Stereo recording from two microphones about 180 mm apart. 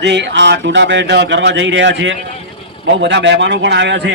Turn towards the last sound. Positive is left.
turn(degrees=-75)  # may be behind; listen again after turning